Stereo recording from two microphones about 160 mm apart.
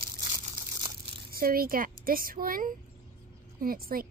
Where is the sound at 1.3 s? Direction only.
65° right (ahead or behind).